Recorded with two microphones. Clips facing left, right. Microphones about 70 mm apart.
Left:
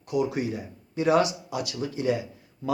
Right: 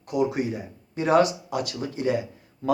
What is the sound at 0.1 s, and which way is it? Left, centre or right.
Speech, right.